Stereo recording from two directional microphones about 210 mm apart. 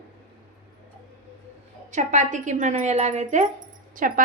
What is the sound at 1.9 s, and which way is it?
Speech, 35° right (ahead or behind).